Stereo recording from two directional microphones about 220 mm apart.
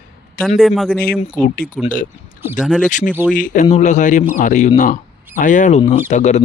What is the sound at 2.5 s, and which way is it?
Speech, 5° left (ahead or behind).